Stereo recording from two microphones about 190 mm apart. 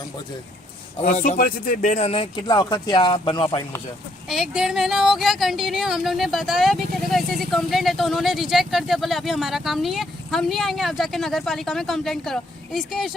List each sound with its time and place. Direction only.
1.0 s speech: 35° left (ahead or behind)
4.3 s speech: centre (ahead or behind)